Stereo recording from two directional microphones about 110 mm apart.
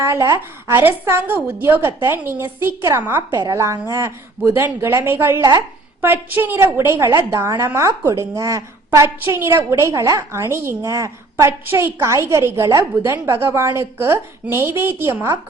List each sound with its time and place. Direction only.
0.0 s a woman's voice: 25° right (ahead or behind)
3.3 s a woman's voice: 30° right (ahead or behind)
5.4 s speech: 35° right (ahead or behind)
6.0 s a woman's voice: 20° right (ahead or behind)